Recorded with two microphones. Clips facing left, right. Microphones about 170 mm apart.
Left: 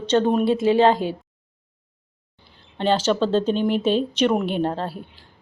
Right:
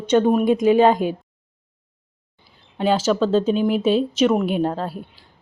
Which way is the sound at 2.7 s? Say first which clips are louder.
Right 1 dB; 10° right (ahead or behind).